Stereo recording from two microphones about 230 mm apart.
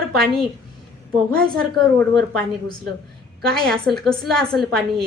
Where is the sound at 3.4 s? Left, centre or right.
Centre.